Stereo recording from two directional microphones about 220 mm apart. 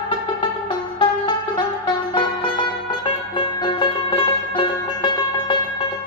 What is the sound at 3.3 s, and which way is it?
Music, 20° left (ahead or behind).